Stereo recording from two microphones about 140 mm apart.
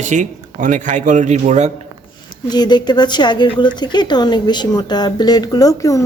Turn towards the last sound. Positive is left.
turn(degrees=25)  # may be behind; listen again after turning